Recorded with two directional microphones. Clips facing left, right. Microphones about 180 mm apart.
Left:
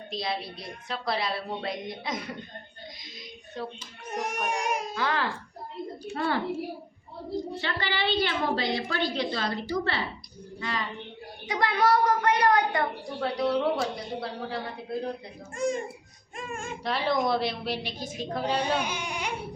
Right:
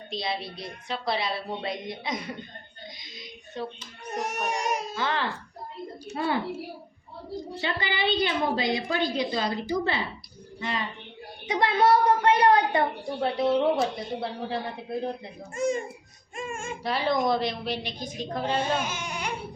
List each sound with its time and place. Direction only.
0.1 s a child's voice: centre (ahead or behind)
3.5 s a child's voice: centre (ahead or behind)
4.1 s speech: 10° left (ahead or behind)
4.9 s a child's voice: centre (ahead or behind)
6.1 s a woman's voice: 15° right (ahead or behind)
7.6 s a woman's voice: 15° right (ahead or behind)
15.5 s a child's voice: centre (ahead or behind)